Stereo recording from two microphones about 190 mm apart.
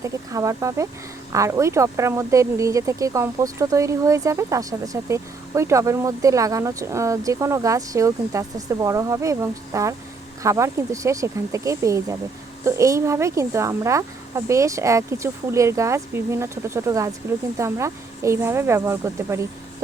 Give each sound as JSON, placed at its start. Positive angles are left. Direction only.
{"t": 0.0, "sound": "speech", "side_deg": -15}